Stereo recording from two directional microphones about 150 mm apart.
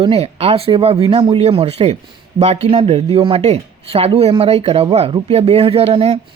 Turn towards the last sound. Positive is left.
turn(degrees=-40)  # may be behind; listen again after turning